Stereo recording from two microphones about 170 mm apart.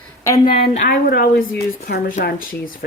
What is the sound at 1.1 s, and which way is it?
Speech, 60° left (ahead or behind).